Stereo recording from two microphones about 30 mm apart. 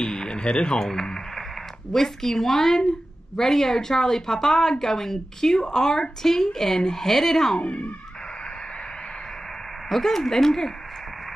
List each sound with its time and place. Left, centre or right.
0.0 s a sound: left
0.7 s radio: centre
1.9 s a woman's voice: centre
9.8 s a woman's voice: centre